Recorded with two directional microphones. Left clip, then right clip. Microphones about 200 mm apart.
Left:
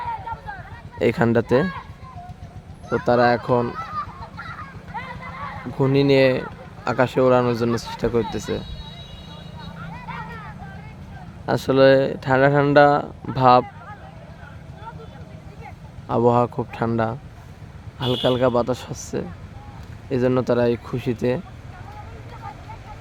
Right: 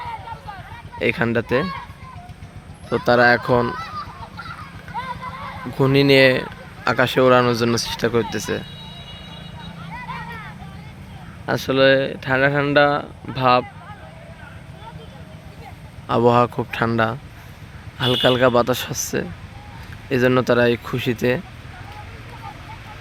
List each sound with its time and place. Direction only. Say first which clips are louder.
0.9 s speech: left 1 dB; 25° left (ahead or behind)
3.0 s speech: right 3 dB; 5° left (ahead or behind)
4.9 s a sound: right 4 dB; 5° left (ahead or behind)
5.7 s speech: right 3 dB; centre (ahead or behind)
11.4 s speech: left 1 dB; 20° left (ahead or behind)
16.0 s speech: right 2 dB; 5° left (ahead or behind)